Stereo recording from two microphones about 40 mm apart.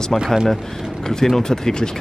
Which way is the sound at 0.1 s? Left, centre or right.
Centre.